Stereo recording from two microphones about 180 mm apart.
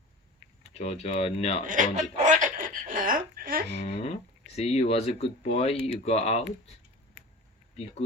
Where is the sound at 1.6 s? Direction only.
45° right (ahead or behind).